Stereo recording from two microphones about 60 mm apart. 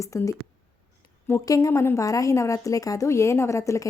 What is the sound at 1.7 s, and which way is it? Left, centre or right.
Speech, left.